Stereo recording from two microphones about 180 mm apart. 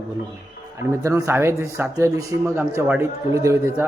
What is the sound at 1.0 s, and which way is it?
A man's voice, 15° right (ahead or behind).